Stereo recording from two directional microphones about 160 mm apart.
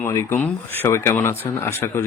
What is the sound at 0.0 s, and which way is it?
A man's voice, 15° left (ahead or behind).